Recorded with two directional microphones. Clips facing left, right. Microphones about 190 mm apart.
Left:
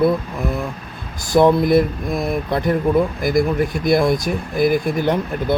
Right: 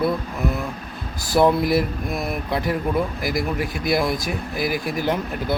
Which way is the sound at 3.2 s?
50° left (ahead or behind).